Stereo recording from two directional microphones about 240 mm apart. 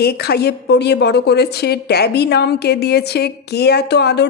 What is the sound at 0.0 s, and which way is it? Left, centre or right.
A woman's voice, left.